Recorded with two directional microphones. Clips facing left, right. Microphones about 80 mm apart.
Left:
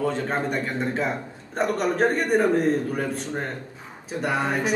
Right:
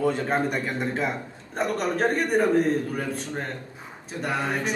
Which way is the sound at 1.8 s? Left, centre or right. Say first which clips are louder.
Left 2 dB; centre.